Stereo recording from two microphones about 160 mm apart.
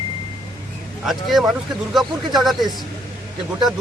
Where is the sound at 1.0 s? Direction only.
Centre (ahead or behind).